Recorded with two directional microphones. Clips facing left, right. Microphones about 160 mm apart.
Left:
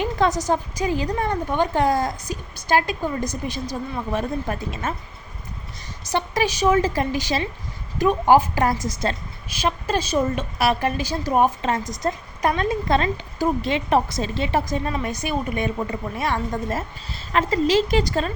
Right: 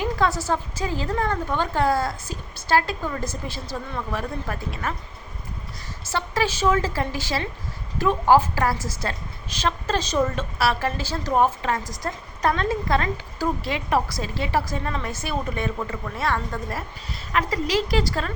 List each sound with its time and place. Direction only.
0.0 s a woman's voice: 20° left (ahead or behind)
6.1 s a woman's voice: 15° left (ahead or behind)